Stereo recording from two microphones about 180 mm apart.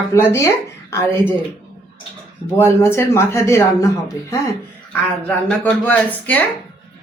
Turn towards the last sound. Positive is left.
turn(degrees=10)  # may be behind; listen again after turning